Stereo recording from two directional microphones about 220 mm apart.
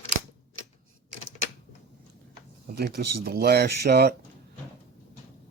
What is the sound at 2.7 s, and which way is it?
Speech, 45° right (ahead or behind).